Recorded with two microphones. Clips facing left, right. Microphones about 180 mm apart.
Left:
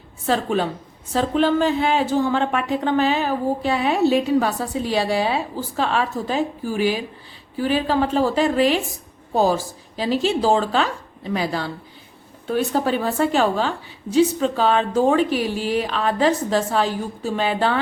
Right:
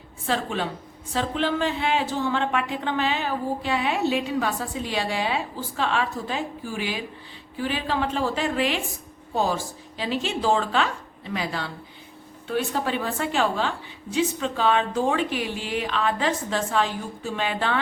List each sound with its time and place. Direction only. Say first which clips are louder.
0.3 s a woman's voice: left 6 dB; 45° left (ahead or behind)